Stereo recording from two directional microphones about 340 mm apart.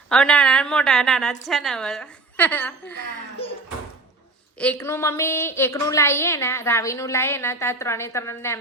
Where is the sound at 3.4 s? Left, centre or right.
Centre.